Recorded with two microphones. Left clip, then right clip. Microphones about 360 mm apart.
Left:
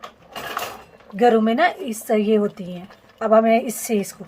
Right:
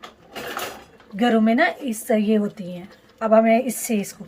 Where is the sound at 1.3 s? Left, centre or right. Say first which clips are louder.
Left 2 dB; left.